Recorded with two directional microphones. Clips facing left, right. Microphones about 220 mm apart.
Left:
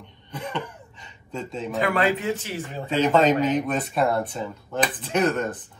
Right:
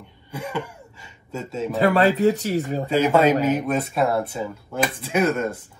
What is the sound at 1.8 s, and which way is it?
Speech, 40° right (ahead or behind).